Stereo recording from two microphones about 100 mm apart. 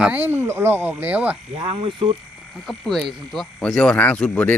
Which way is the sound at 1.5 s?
75° right (ahead or behind).